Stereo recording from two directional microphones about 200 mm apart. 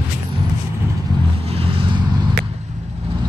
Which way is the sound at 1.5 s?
30° right (ahead or behind).